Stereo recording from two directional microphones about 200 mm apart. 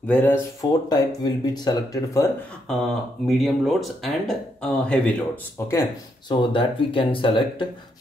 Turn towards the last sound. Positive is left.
turn(degrees=25)  # may be behind; listen again after turning